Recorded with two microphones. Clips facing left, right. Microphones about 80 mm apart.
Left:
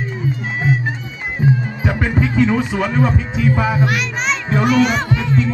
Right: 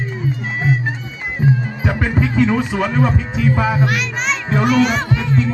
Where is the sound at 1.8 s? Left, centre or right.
Right.